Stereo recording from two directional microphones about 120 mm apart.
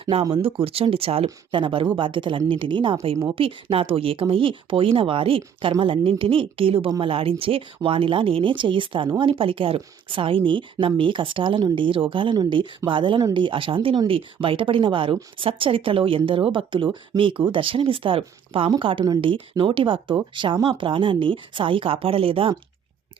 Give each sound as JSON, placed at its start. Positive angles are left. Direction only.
{"t": 0.0, "sound": "speech", "side_deg": -50}